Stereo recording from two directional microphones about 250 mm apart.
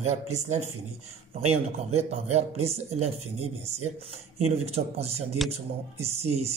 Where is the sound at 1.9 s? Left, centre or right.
Right.